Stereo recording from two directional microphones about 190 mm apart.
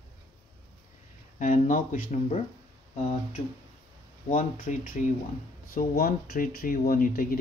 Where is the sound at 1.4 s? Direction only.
45° left (ahead or behind).